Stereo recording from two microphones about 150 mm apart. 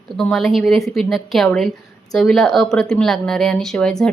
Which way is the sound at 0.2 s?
Centre (ahead or behind).